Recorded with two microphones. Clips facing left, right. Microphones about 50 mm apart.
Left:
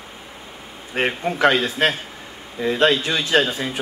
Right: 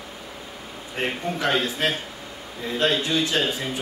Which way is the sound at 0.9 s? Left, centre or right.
Left.